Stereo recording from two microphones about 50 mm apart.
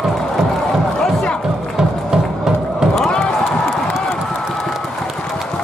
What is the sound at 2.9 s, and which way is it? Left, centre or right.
Crowd, centre.